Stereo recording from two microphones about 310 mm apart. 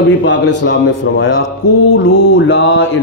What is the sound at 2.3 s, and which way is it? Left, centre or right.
Speech, left.